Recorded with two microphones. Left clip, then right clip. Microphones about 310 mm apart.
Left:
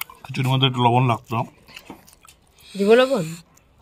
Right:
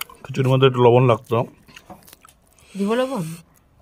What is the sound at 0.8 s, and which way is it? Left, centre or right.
Speech, centre.